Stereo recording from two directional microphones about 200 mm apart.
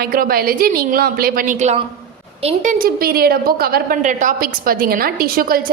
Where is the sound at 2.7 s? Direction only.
50° right (ahead or behind).